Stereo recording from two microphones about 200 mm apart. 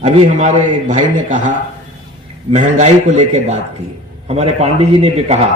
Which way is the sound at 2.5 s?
35° right (ahead or behind).